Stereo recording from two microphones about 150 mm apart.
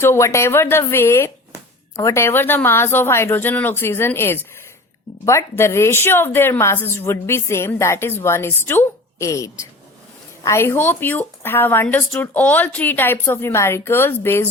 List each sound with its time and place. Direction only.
0.0 s speech: 15° left (ahead or behind)